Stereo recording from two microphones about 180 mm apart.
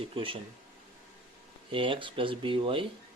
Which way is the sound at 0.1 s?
30° right (ahead or behind).